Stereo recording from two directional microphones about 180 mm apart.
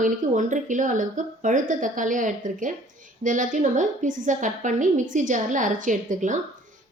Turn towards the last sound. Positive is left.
turn(degrees=-45)  # may be behind; listen again after turning